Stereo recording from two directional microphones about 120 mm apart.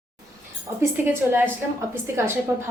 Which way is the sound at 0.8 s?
15° right (ahead or behind).